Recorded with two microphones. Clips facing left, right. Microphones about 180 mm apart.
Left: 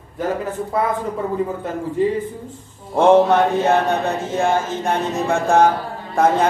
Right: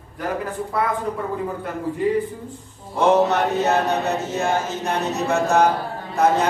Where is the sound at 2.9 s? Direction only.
50° left (ahead or behind).